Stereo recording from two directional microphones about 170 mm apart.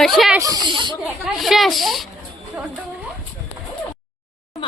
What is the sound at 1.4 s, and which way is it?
Speech, centre (ahead or behind).